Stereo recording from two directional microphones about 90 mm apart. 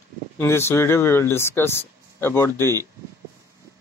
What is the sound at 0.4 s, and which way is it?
Speech, 30° left (ahead or behind).